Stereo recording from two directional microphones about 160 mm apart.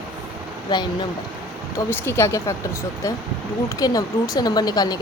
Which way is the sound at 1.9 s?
15° left (ahead or behind).